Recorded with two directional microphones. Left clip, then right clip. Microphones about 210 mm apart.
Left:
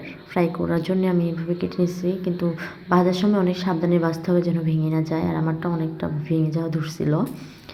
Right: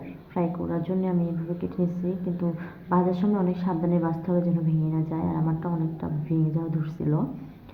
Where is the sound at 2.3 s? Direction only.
20° left (ahead or behind).